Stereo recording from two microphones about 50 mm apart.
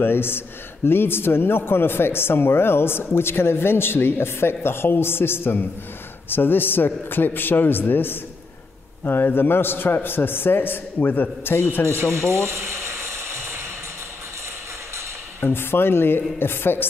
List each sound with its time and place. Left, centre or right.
0.0 s a man's voice: left
12.0 s a sound: right
15.4 s a man's voice: left